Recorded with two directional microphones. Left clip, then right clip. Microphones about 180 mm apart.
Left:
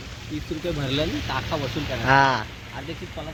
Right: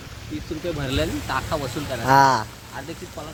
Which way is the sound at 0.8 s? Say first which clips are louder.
Even; centre (ahead or behind).